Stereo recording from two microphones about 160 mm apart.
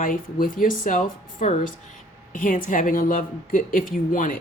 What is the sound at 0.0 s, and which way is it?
A woman's voice, 60° left (ahead or behind).